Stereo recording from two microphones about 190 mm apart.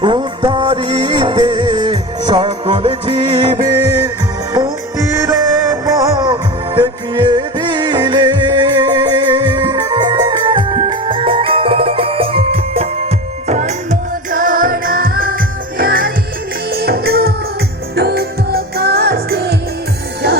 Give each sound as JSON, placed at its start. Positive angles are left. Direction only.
{"t": 0.0, "sound": "music", "side_deg": -25}
{"t": 5.1, "sound": "music", "side_deg": -15}